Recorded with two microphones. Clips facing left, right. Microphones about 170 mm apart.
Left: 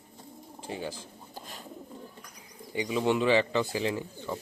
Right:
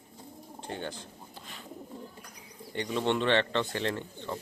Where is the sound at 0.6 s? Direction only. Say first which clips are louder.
Left 1 dB; 5° left (ahead or behind).